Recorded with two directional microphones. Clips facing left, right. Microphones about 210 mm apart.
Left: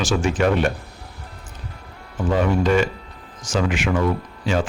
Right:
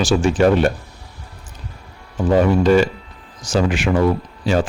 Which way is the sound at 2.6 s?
35° right (ahead or behind).